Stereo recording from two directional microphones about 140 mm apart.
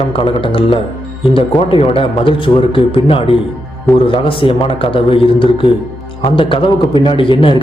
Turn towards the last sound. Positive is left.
turn(degrees=40)  # may be behind; listen again after turning